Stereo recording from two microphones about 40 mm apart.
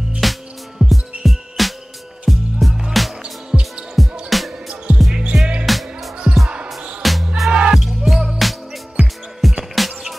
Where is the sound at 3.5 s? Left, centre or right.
Centre.